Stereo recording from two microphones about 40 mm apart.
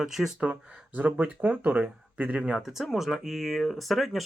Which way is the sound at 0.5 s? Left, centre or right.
Right.